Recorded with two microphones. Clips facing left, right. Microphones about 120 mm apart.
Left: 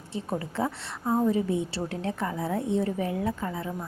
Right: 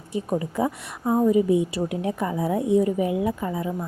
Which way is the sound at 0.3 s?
15° right (ahead or behind).